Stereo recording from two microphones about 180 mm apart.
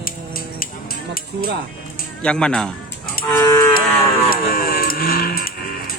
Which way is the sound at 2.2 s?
5° left (ahead or behind).